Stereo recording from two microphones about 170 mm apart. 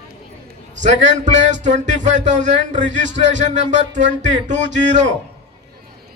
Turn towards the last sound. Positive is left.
turn(degrees=-45)  # may be behind; listen again after turning